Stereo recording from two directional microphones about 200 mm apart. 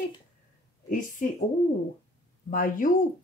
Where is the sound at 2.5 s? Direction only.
45° left (ahead or behind).